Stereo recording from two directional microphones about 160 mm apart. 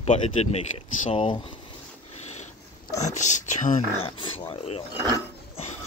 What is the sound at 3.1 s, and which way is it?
Speech, 50° left (ahead or behind).